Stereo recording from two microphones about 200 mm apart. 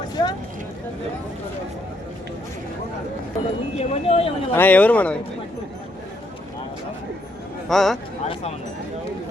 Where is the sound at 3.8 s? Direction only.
30° left (ahead or behind).